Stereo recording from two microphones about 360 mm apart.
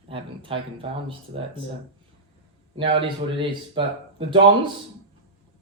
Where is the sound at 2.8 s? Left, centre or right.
Centre.